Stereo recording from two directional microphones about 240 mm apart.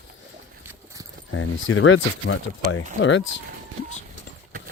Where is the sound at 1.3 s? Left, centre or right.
Left.